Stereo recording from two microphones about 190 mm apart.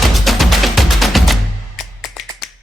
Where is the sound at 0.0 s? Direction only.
Centre (ahead or behind).